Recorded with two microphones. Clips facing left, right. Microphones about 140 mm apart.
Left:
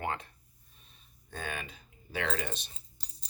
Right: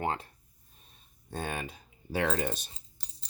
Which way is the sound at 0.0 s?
30° right (ahead or behind).